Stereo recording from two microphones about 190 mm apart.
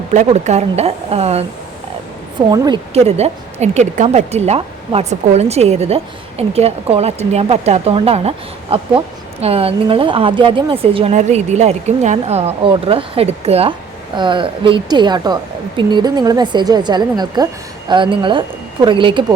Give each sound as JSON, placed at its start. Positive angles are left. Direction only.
{"t": 0.1, "sound": "speech", "side_deg": -40}
{"t": 2.5, "sound": "a woman's voice", "side_deg": -20}
{"t": 2.9, "sound": "a woman's voice", "side_deg": -35}